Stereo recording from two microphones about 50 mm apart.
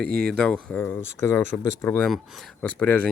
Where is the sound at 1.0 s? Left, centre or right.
Left.